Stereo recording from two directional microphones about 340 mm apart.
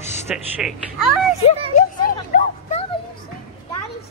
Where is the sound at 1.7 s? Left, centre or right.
Left.